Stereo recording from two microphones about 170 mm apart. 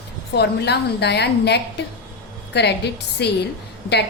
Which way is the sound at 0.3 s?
80° left.